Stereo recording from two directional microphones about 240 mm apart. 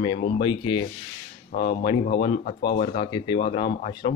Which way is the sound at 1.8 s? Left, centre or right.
Left.